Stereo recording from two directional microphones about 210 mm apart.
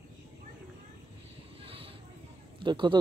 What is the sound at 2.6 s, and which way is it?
Speech, 20° right (ahead or behind).